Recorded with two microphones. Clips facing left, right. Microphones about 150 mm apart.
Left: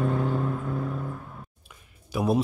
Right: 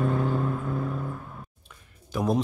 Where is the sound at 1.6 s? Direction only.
10° left (ahead or behind).